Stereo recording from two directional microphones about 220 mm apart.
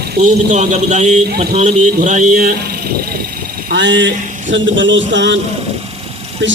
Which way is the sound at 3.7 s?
55° right (ahead or behind).